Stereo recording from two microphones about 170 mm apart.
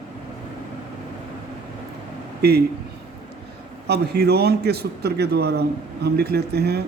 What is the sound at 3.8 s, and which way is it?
A man's voice, 70° right (ahead or behind).